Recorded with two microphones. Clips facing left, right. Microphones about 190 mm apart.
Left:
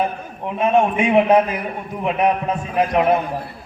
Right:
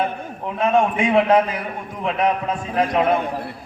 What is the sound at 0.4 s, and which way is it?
Speech, 20° left (ahead or behind).